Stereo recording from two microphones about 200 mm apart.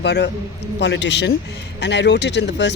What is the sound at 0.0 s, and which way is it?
Speech, 60° left (ahead or behind).